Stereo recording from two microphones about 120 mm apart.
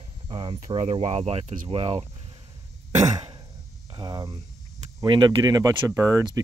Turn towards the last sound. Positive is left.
turn(degrees=-25)  # may be behind; listen again after turning